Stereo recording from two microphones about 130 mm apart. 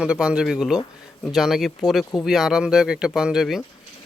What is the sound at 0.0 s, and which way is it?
Speech, 10° right (ahead or behind).